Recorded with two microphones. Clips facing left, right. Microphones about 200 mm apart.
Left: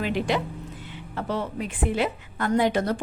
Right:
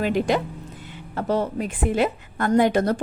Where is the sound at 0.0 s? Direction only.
45° right (ahead or behind).